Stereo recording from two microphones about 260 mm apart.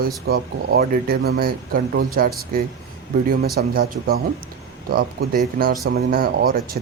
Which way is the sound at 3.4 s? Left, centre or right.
Right.